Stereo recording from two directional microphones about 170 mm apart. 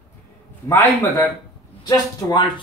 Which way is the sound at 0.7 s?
15° left (ahead or behind).